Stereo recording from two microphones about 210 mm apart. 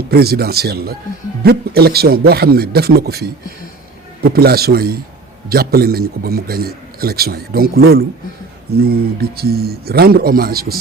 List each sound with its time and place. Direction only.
0.1 s a man's voice: 50° right (ahead or behind)